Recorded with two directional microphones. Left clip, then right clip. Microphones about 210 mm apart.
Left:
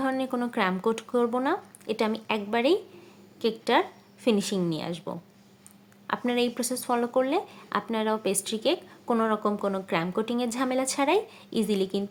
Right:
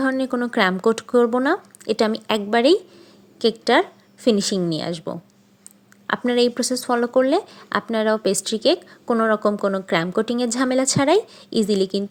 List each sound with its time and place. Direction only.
0.0 s speech: 25° right (ahead or behind)